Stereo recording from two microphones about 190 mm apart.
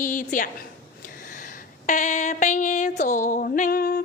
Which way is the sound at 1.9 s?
40° left (ahead or behind).